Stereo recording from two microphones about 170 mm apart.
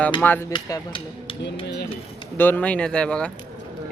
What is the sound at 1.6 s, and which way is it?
Speech, 80° left.